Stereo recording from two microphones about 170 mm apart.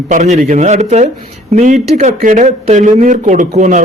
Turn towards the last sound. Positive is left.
turn(degrees=-45)  # may be behind; listen again after turning